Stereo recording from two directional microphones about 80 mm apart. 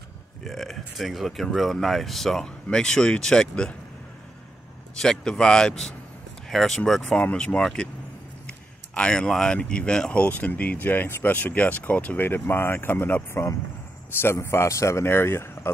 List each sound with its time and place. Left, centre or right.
0.4 s speech: centre
4.9 s a man's voice: centre; by 15.7 s left